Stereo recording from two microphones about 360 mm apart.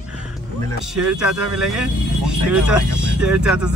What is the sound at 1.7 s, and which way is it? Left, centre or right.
Speech, centre.